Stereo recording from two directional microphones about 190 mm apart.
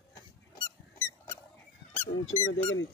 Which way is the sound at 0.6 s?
15° left (ahead or behind).